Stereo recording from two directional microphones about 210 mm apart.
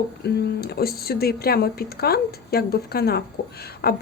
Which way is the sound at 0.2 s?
50° left (ahead or behind).